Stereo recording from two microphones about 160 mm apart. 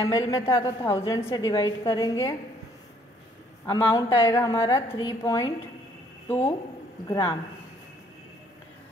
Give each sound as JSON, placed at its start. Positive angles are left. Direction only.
{"t": 0.0, "sound": "a woman's voice", "side_deg": 20}
{"t": 3.6, "sound": "a woman's voice", "side_deg": 20}
{"t": 7.1, "sound": "a woman's voice", "side_deg": 25}